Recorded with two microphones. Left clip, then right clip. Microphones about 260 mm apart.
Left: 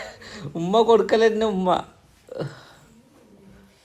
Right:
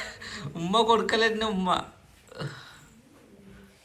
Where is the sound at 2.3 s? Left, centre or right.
Left.